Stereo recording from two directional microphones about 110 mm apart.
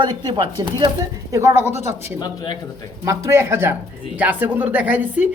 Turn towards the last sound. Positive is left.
turn(degrees=-15)  # may be behind; listen again after turning